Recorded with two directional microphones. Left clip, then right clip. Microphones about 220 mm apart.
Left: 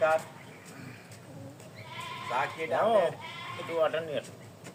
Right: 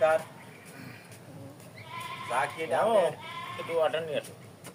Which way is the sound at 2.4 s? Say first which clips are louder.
Right 1 dB; 35° right (ahead or behind).